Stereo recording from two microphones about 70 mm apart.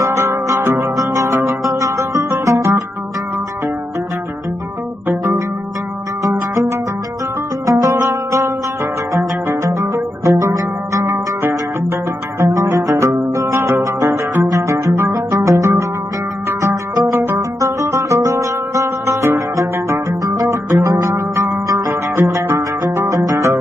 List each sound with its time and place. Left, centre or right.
0.0 s music: right
6.2 s music: right
12.4 s music: right
17.1 s music: right